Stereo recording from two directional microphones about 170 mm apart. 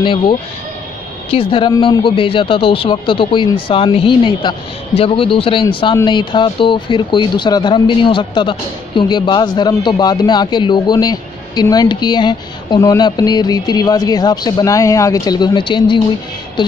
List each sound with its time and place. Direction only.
0.0 s speech: 30° left (ahead or behind)